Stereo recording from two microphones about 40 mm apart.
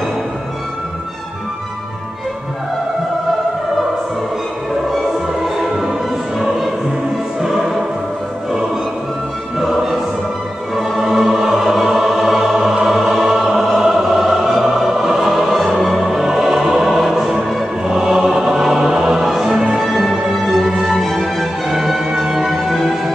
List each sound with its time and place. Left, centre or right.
5.4 s music: centre
9.6 s music: centre
12.8 s choir: centre
13.7 s music: centre
17.8 s choir: centre
19.1 s music: centre